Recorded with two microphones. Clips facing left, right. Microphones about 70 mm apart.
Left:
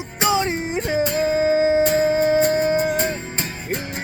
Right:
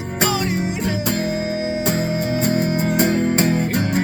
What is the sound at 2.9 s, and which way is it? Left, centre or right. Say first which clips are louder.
Music: right 7 dB; right.